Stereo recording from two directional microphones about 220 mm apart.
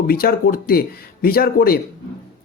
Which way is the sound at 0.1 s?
40° left (ahead or behind).